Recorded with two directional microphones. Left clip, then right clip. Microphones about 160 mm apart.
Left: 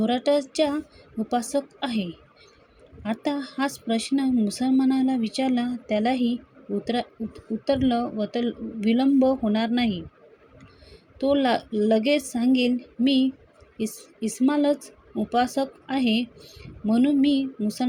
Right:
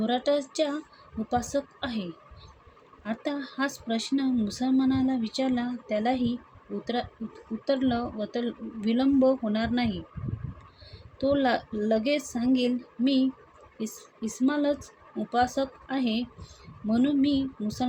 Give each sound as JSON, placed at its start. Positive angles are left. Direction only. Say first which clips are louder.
{"t": 0.0, "sound": "speech", "louder": "left 4 dB", "side_deg": 30}
{"t": 7.6, "sound": "speech", "louder": "left 4 dB", "side_deg": 30}
{"t": 11.2, "sound": "speech", "louder": "left 3 dB", "side_deg": 30}